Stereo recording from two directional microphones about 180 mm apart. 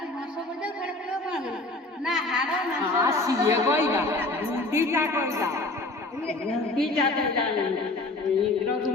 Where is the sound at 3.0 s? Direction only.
15° right (ahead or behind).